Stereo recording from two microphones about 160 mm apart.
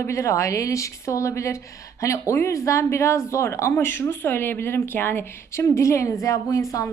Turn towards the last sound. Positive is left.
turn(degrees=20)  # may be behind; listen again after turning